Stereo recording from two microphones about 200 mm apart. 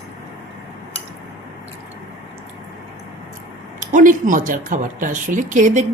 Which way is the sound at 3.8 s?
40° right (ahead or behind).